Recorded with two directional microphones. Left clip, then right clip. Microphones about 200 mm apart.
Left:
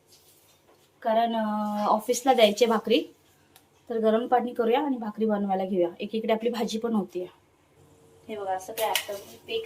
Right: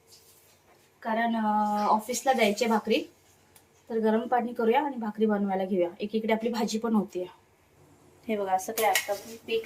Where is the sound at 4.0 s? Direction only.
25° left (ahead or behind).